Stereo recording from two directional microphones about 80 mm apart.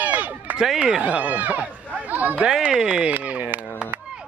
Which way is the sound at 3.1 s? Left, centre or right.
Centre.